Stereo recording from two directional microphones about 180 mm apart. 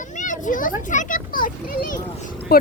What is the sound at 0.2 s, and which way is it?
A child's voice, 45° left (ahead or behind).